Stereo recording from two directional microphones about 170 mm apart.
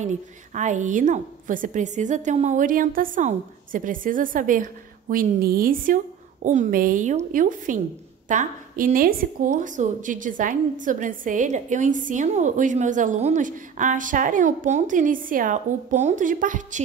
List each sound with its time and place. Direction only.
0.0 s a woman's voice: 45° right (ahead or behind)